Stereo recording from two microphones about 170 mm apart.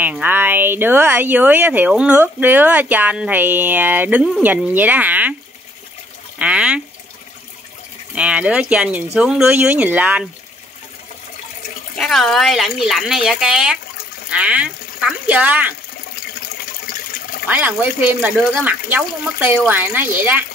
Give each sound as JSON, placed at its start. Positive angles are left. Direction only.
{"t": 0.0, "sound": "speech", "side_deg": -10}
{"t": 6.3, "sound": "speech", "side_deg": -5}
{"t": 8.1, "sound": "speech", "side_deg": -5}
{"t": 12.0, "sound": "speech", "side_deg": 0}
{"t": 16.9, "sound": "water", "side_deg": 60}
{"t": 17.5, "sound": "speech", "side_deg": -10}